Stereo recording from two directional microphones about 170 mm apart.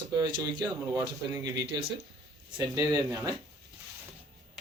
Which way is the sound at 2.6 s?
20° right (ahead or behind).